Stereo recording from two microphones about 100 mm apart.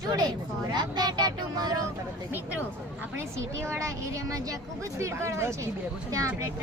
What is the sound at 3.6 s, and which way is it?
Speech, 30° right (ahead or behind).